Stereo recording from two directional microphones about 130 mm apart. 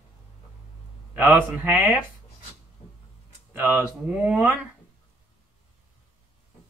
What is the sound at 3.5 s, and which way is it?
A man's voice, 15° right (ahead or behind).